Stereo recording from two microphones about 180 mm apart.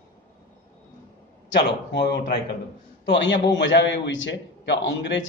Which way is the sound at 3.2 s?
80° left.